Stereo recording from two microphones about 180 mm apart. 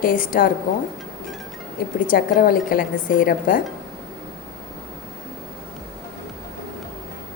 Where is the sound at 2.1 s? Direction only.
50° left (ahead or behind).